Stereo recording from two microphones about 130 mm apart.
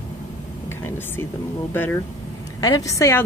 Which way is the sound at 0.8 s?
15° left (ahead or behind).